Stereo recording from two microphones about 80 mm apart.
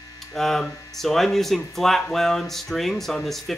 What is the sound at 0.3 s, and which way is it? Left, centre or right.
Speech, centre.